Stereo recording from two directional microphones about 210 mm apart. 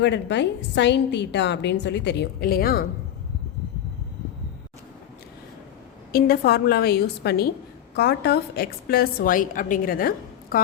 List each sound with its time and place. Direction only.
0.0 s a woman's voice: 55° left (ahead or behind)
6.1 s a woman's voice: 45° left (ahead or behind)